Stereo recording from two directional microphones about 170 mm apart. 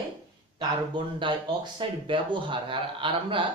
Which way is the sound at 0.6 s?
30° right (ahead or behind).